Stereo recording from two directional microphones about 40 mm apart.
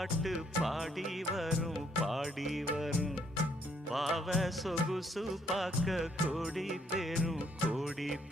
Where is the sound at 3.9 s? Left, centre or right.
Centre.